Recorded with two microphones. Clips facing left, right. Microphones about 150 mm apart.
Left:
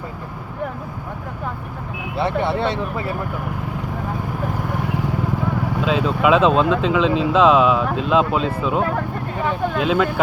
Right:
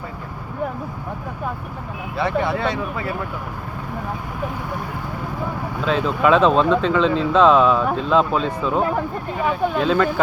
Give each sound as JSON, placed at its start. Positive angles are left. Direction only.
{"t": 2.1, "sound": "speech", "side_deg": 25}
{"t": 5.8, "sound": "speech", "side_deg": 5}
{"t": 8.8, "sound": "speech", "side_deg": -15}
{"t": 9.7, "sound": "speech", "side_deg": 5}